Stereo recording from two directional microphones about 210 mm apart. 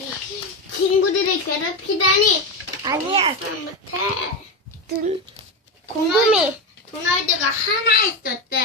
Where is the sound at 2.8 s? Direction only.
25° right (ahead or behind).